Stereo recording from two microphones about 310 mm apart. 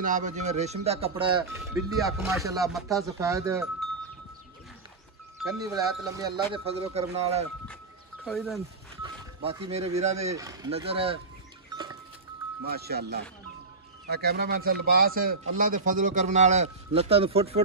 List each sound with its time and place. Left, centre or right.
0.0 s a man's voice: right
2.7 s speech: centre
5.4 s speech: centre
8.2 s speech: centre
9.0 s speech: centre
10.3 s speech: centre
11.7 s music: centre
12.6 s a man's voice: right